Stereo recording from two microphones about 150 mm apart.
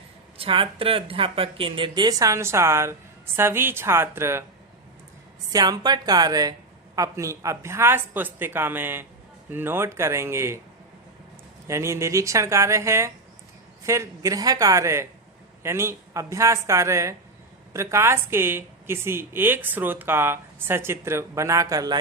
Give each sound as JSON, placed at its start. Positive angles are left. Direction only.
{"t": 0.3, "sound": "a woman's voice", "side_deg": -35}
{"t": 5.5, "sound": "a woman's voice", "side_deg": -25}
{"t": 11.7, "sound": "a woman's voice", "side_deg": -20}